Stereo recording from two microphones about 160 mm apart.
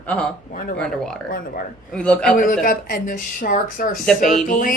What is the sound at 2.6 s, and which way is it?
A woman's voice, 60° left (ahead or behind).